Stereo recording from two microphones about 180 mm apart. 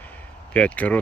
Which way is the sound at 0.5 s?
5° left (ahead or behind).